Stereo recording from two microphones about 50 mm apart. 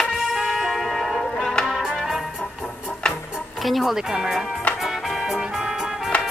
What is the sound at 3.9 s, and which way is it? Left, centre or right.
Speech, centre.